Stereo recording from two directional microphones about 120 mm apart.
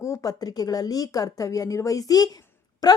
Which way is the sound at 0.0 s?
25° left (ahead or behind).